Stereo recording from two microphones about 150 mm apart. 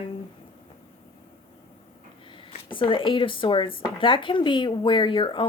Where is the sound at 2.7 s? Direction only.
35° left (ahead or behind).